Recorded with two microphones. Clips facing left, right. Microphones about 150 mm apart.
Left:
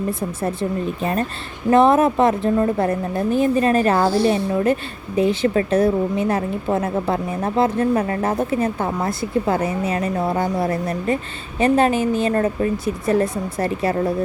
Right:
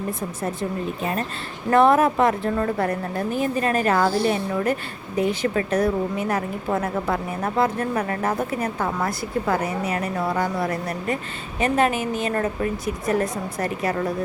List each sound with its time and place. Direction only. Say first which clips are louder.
1.7 s a woman's voice: left 2 dB; 20° left (ahead or behind)